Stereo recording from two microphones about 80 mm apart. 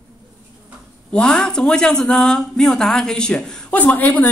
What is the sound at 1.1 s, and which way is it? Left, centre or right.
A woman's voice, centre.